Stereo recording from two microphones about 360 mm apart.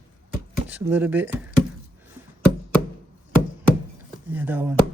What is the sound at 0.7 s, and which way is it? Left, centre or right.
Speech, centre.